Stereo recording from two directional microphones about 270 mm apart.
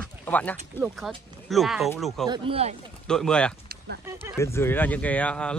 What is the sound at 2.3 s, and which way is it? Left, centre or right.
Speech, right.